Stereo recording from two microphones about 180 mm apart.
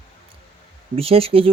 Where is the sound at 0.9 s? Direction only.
30° right (ahead or behind).